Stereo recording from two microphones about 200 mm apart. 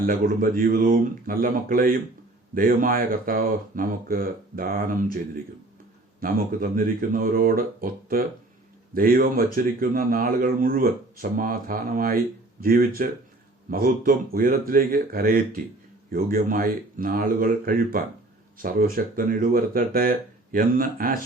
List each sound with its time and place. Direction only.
0.0 s speech: 45° right (ahead or behind)
6.1 s speech: 45° right (ahead or behind)